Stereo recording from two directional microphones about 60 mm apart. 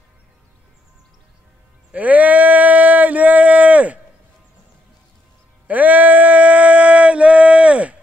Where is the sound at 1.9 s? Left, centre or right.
Right.